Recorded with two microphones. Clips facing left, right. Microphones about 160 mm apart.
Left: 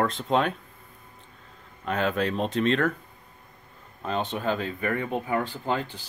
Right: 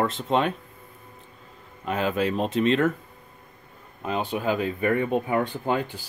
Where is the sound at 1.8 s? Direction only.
5° right (ahead or behind).